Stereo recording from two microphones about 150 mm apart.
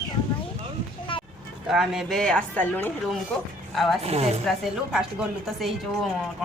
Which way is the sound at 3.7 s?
Centre (ahead or behind).